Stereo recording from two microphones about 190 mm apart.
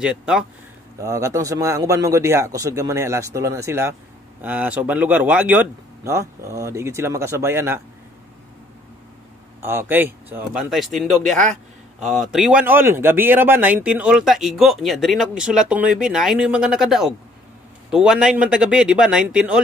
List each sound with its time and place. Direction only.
0.0 s speech: 5° right (ahead or behind)
1.0 s speech: 15° right (ahead or behind)
9.6 s speech: 10° right (ahead or behind)